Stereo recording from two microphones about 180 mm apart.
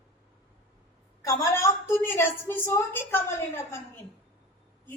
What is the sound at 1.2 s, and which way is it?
A woman's voice, 15° left (ahead or behind).